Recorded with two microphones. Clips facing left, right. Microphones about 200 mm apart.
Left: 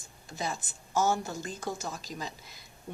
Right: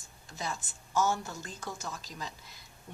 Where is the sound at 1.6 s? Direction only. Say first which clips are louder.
Left 4 dB; 30° left (ahead or behind).